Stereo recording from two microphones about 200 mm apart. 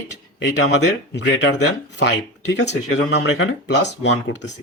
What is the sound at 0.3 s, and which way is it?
Speech, 55° left (ahead or behind).